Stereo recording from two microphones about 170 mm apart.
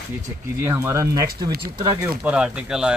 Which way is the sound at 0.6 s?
15° right (ahead or behind).